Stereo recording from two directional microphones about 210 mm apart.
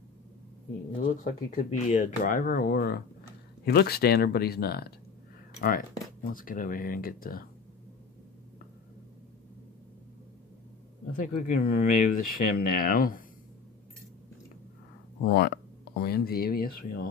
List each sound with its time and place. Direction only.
0.9 s speech: 40° left (ahead or behind)
11.1 s speech: 40° left (ahead or behind)
15.2 s speech: 50° left (ahead or behind)